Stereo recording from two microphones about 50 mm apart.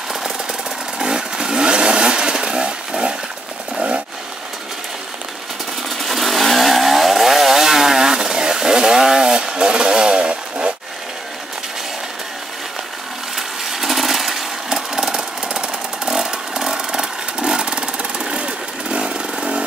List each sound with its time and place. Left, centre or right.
0.1 s vehicle: centre
5.9 s chainsaw: centre
13.7 s a sound: centre